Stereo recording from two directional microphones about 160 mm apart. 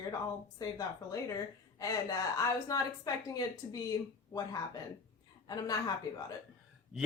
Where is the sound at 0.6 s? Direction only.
20° left (ahead or behind).